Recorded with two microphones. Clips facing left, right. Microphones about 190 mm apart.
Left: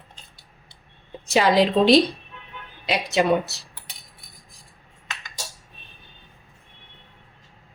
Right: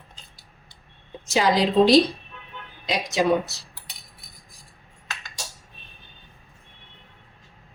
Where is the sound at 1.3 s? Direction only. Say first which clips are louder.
Left 3 dB; 60° left (ahead or behind).